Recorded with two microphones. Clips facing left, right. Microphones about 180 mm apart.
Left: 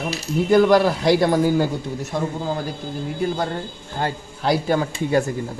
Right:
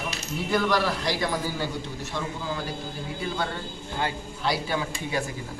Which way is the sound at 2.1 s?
45° left (ahead or behind).